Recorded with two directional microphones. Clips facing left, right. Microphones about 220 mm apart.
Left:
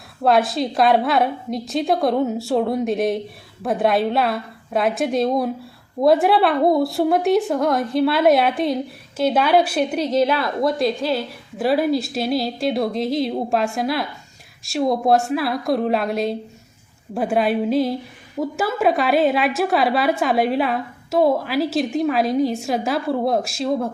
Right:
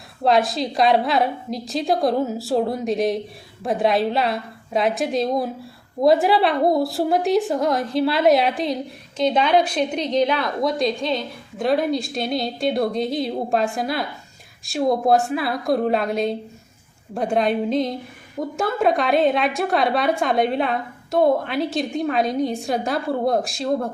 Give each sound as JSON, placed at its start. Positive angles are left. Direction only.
{"t": 0.3, "sound": "a woman's voice", "side_deg": 0}